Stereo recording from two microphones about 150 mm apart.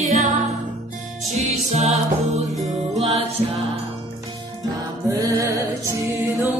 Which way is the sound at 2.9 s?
45° right (ahead or behind).